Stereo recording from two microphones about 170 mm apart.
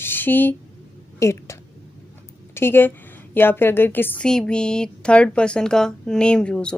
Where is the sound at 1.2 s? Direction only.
15° left (ahead or behind).